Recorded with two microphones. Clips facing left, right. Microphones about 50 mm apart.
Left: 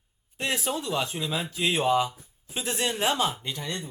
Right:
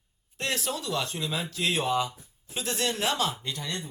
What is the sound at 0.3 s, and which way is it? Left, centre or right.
Speech, centre.